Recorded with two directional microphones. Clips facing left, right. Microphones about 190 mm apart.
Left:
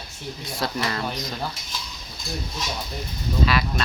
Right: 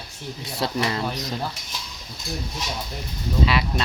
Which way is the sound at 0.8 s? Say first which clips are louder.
Right 2 dB; 20° right (ahead or behind).